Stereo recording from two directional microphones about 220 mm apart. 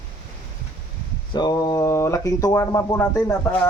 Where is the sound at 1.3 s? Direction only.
20° left (ahead or behind).